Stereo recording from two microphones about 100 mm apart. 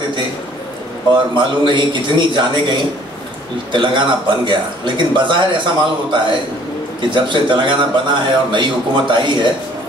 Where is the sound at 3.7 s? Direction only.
55° right (ahead or behind).